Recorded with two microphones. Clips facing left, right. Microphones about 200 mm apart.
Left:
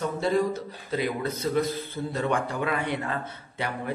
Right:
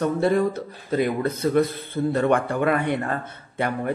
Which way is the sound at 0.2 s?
55° right (ahead or behind).